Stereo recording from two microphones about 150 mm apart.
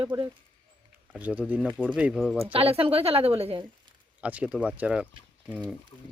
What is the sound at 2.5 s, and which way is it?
A woman's voice, 40° right (ahead or behind).